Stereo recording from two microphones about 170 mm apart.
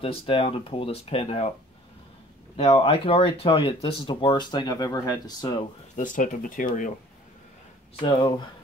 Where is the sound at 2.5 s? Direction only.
35° left (ahead or behind).